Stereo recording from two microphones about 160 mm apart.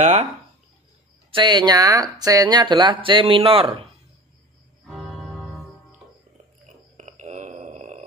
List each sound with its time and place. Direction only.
0.0 s speech: 45° right (ahead or behind)
1.3 s speech: 25° right (ahead or behind)
4.8 s music: centre (ahead or behind)
7.0 s a sound: 45° right (ahead or behind)